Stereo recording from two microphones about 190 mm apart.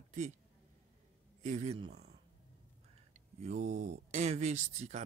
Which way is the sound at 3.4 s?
35° right (ahead or behind).